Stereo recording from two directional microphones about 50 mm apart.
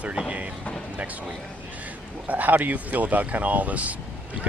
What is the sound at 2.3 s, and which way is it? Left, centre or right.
Speech, right.